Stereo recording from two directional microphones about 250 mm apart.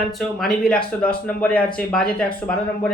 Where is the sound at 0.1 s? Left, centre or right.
Centre.